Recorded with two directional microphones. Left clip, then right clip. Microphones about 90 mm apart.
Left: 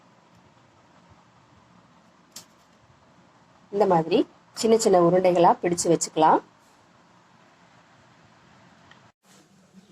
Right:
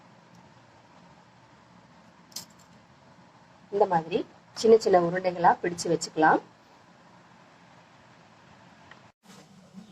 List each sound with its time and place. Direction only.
3.7 s a woman's voice: 35° left (ahead or behind)